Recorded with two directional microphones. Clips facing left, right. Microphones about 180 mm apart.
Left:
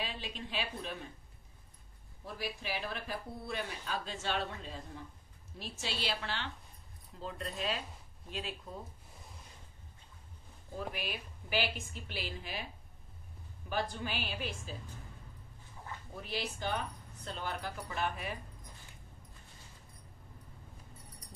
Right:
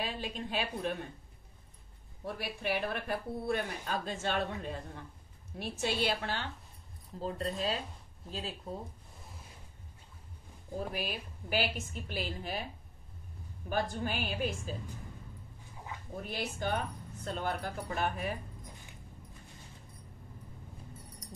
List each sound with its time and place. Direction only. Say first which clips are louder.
0.0 s speech: right 4 dB; 50° right (ahead or behind)
2.2 s speech: right 5 dB; 60° right (ahead or behind)
7.2 s speech: right 5 dB; 35° right (ahead or behind)
10.8 s speech: right 3 dB; 40° right (ahead or behind)
13.7 s speech: right 3 dB; 45° right (ahead or behind)
16.2 s speech: right 2 dB; 50° right (ahead or behind)